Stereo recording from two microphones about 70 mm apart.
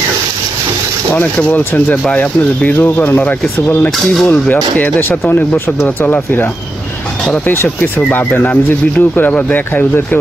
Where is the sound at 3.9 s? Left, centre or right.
Centre.